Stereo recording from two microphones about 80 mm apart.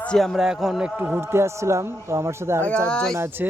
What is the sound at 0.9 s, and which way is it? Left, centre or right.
Speech, right.